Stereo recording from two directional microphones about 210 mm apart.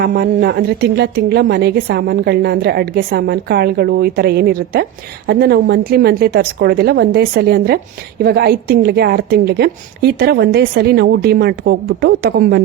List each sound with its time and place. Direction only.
0.0 s a woman's voice: 45° right (ahead or behind)